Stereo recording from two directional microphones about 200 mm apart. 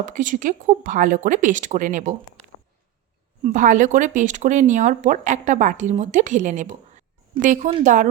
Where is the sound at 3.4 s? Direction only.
40° right (ahead or behind).